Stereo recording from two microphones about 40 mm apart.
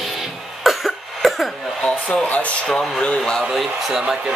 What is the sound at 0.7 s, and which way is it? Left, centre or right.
Cough, centre.